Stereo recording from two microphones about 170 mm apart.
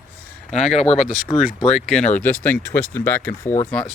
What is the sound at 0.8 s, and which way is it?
Speech, 40° left (ahead or behind).